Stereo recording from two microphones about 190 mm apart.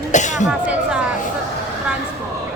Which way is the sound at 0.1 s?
40° left (ahead or behind).